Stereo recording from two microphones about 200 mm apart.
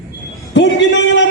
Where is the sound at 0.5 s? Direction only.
60° left (ahead or behind).